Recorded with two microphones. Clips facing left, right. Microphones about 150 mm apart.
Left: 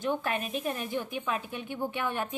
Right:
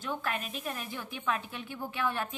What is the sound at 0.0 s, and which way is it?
A woman's voice, 20° left (ahead or behind).